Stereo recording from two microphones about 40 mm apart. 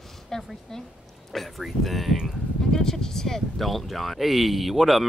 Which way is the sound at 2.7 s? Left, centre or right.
Centre.